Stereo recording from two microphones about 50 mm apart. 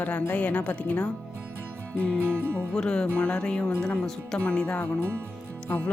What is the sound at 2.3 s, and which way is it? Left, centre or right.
Music, right.